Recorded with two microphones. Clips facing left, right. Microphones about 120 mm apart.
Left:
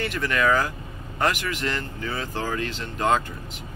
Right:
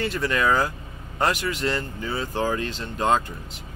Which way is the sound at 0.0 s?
20° right (ahead or behind).